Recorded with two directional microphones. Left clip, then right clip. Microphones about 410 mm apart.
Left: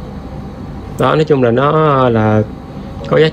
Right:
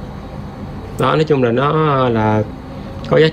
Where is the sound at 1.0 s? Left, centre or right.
Centre.